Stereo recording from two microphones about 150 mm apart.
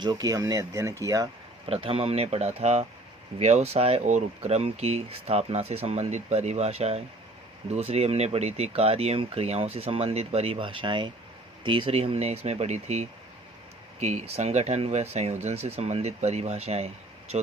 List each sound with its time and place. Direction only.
0.0 s speech: 25° right (ahead or behind)
1.6 s speech: 35° right (ahead or behind)